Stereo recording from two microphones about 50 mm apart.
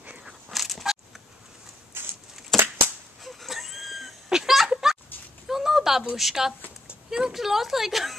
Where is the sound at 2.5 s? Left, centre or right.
Centre.